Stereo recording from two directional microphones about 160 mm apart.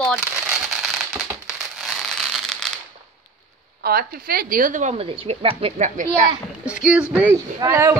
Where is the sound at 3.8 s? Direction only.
70° right (ahead or behind); by 4.9 s 55° right (ahead or behind).